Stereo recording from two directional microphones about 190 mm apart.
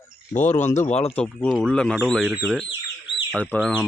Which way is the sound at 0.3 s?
40° left (ahead or behind).